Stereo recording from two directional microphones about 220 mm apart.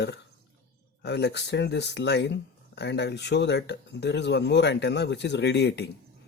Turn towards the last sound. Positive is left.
turn(degrees=50)  # may be behind; listen again after turning